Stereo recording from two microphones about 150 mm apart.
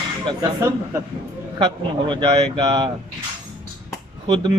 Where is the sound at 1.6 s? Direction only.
30° right (ahead or behind).